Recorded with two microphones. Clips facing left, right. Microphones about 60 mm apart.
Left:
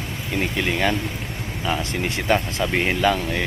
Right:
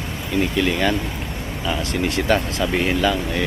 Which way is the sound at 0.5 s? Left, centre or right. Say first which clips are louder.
Right 1 dB; left.